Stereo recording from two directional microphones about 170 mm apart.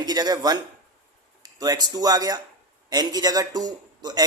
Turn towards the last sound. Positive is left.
turn(degrees=-25)  # may be behind; listen again after turning